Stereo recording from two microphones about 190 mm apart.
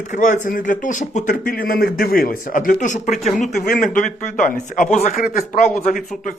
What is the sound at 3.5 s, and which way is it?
Speech, 55° left (ahead or behind).